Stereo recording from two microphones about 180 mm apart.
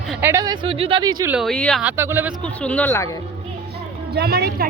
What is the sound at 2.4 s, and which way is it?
Speech, 5° left (ahead or behind).